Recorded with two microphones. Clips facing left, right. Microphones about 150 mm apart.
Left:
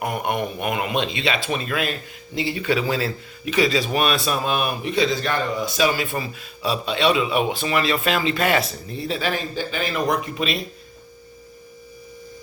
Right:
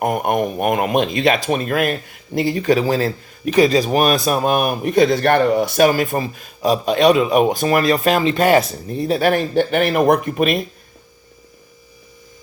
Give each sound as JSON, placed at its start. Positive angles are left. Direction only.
{"t": 0.0, "sound": "speech", "side_deg": -45}